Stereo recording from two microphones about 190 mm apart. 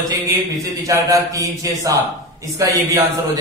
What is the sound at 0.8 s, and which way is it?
A man's voice, 20° right (ahead or behind).